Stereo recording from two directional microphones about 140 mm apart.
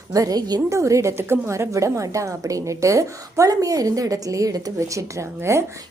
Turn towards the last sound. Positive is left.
turn(degrees=-20)  # may be behind; listen again after turning